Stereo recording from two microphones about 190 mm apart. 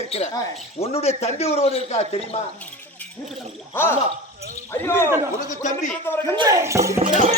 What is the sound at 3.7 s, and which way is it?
Speech, 10° left (ahead or behind).